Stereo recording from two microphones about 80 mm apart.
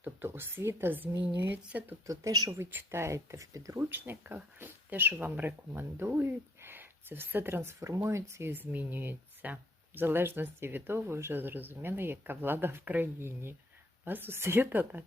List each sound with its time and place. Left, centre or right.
0.0 s speech: right
2.5 s speech: right
3.8 s speech: right